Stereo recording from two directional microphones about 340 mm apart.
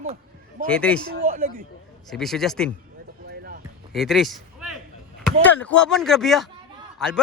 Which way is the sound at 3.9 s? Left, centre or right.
Centre.